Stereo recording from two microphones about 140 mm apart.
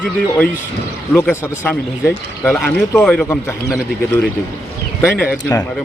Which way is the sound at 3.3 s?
20° left (ahead or behind).